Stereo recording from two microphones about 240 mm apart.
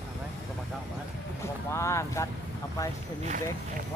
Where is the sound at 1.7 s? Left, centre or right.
Centre.